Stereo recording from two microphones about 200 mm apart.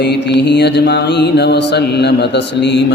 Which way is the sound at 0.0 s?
60° left (ahead or behind).